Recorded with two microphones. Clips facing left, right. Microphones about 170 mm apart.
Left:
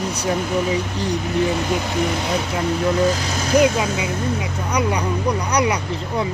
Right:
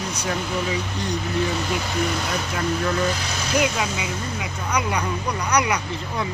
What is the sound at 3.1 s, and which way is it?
Speech, 40° left (ahead or behind).